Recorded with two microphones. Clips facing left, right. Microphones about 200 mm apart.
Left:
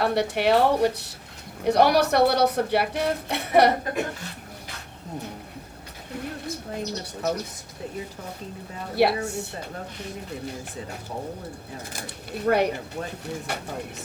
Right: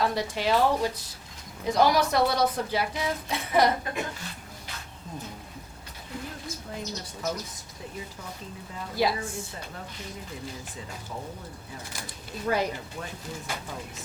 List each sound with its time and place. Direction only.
0.0 s speech: 65° left (ahead or behind)
6.4 s speech: 65° left (ahead or behind)
8.8 s speech: 65° left (ahead or behind)
11.9 s speech: 65° left (ahead or behind)